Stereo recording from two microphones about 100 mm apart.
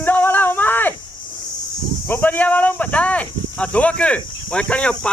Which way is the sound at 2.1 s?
15° left (ahead or behind).